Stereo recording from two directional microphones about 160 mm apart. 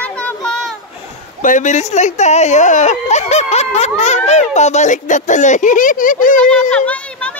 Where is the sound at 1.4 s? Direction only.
50° left (ahead or behind).